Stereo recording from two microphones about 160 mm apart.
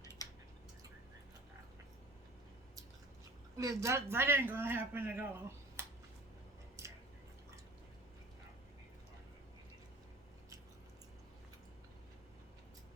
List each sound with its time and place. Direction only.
0.0 s drip: 20° left (ahead or behind)
3.6 s speech: 20° right (ahead or behind)
6.8 s a sound: 20° right (ahead or behind)